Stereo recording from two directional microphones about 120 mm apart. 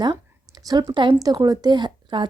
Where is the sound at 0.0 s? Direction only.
35° right (ahead or behind).